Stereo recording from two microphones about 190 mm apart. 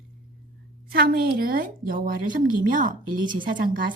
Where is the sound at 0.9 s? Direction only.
50° right (ahead or behind).